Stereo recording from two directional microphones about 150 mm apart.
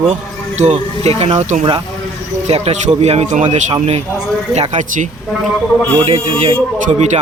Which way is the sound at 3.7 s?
40° right (ahead or behind).